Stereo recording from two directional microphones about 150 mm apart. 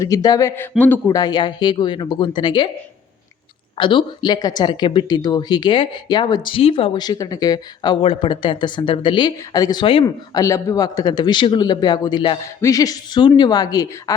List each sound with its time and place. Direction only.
0.0 s speech: 25° left (ahead or behind)
3.8 s speech: 35° left (ahead or behind)